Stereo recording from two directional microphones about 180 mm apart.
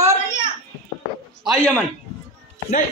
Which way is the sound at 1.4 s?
Centre (ahead or behind).